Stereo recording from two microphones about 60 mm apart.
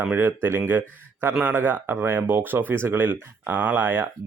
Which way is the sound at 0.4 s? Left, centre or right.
Right.